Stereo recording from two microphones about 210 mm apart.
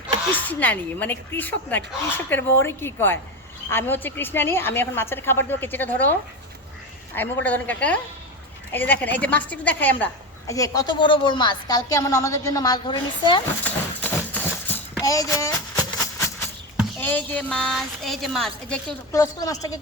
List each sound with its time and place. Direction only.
0.4 s a woman's voice: 10° left (ahead or behind)
7.2 s a woman's voice: 10° left (ahead or behind)
13.7 s a sound: 10° left (ahead or behind)
17.0 s a woman's voice: 10° left (ahead or behind)
19.1 s a woman's voice: 15° left (ahead or behind)